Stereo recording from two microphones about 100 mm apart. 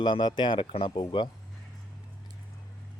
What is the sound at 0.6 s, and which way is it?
Speech, 70° left (ahead or behind).